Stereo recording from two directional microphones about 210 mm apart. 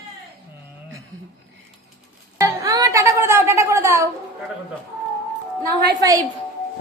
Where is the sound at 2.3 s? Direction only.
15° right (ahead or behind).